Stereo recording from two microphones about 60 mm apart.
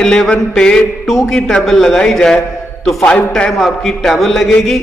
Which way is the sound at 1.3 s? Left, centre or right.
Centre.